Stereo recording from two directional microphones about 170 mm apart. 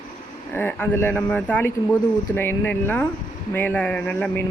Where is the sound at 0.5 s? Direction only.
10° left (ahead or behind).